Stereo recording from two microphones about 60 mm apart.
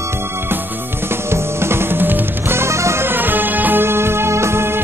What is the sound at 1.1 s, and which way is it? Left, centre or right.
Music, right.